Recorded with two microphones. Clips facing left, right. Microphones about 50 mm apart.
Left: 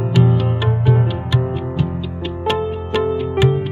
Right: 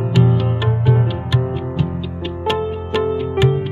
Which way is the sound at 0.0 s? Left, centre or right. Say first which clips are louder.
Even; left.